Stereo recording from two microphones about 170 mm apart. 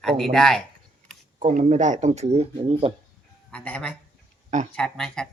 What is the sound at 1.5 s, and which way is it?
Speech, 45° right (ahead or behind).